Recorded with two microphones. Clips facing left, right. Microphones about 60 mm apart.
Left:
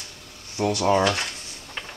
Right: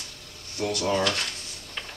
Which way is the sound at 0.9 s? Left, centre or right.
Centre.